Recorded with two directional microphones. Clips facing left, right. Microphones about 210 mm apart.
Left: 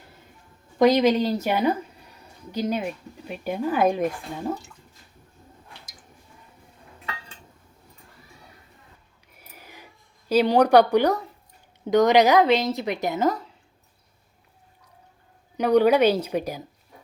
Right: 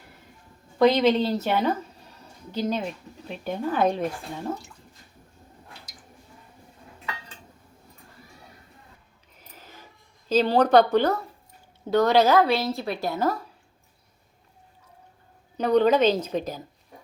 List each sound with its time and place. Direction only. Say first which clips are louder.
0.8 s speech: left 1 dB; 15° left (ahead or behind)
9.3 s a sound: left 1 dB; 10° left (ahead or behind)
11.9 s speech: left 2 dB; 15° left (ahead or behind)
15.5 s speech: left 2 dB; 10° left (ahead or behind)